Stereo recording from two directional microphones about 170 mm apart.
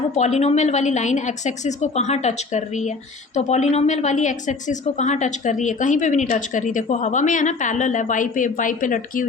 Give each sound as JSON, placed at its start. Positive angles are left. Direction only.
{"t": 0.2, "sound": "a woman's voice", "side_deg": 40}